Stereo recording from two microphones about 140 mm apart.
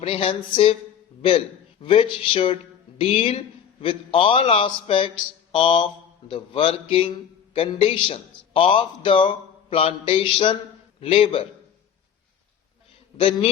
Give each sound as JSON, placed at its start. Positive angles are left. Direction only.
{"t": 0.0, "sound": "a man's voice", "side_deg": 40}
{"t": 1.8, "sound": "a man's voice", "side_deg": 40}
{"t": 13.1, "sound": "a man's voice", "side_deg": 40}